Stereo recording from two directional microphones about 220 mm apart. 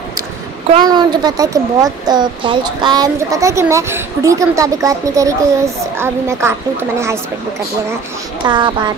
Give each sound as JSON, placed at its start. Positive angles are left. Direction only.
{"t": 0.7, "sound": "speech", "side_deg": -20}
{"t": 8.5, "sound": "speech", "side_deg": -20}